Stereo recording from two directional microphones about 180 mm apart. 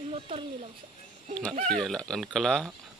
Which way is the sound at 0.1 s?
30° right (ahead or behind).